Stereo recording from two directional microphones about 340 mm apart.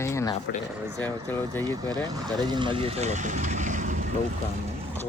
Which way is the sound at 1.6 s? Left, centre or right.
Centre.